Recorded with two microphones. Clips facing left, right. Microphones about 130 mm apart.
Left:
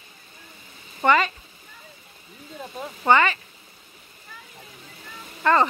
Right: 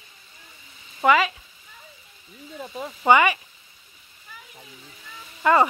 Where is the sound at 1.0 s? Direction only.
5° right (ahead or behind).